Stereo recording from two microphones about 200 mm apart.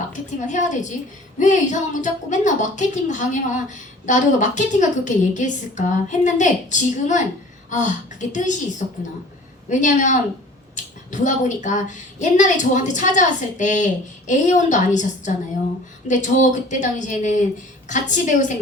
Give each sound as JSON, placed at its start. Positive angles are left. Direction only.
{"t": 0.1, "sound": "a woman's voice", "side_deg": 40}
{"t": 9.6, "sound": "a woman's voice", "side_deg": 40}